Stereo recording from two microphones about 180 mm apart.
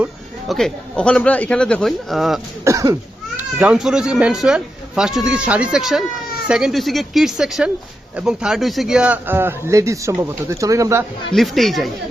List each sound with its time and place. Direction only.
0.0 s speech: centre (ahead or behind)
2.6 s cough: 20° right (ahead or behind)
3.3 s a man's voice: 5° right (ahead or behind)
11.3 s speech: centre (ahead or behind)